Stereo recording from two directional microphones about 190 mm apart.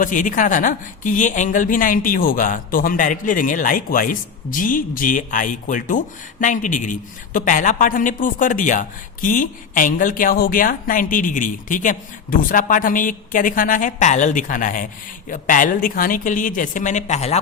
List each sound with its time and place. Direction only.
0.0 s speech: 45° left (ahead or behind)